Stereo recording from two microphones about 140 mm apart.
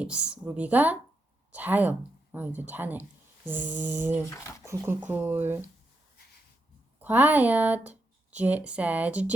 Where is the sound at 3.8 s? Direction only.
60° right (ahead or behind).